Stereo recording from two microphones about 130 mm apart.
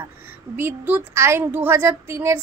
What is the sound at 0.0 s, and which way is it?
A woman's voice, 20° right (ahead or behind).